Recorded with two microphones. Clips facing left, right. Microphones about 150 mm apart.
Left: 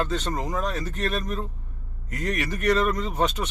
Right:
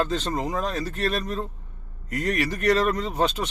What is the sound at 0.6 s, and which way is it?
Speech, 35° right (ahead or behind).